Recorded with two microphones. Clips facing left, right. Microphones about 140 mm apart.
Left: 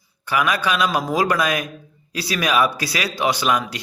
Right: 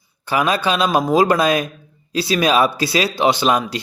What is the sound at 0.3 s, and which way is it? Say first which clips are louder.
A man's voice: right 3 dB; 30° right (ahead or behind).